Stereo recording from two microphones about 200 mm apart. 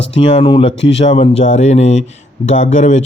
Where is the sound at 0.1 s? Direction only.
25° left (ahead or behind).